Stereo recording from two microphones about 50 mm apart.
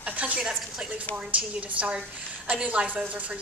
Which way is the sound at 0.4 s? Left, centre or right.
Centre.